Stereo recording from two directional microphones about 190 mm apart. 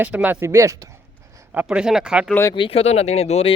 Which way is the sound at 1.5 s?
5° right (ahead or behind).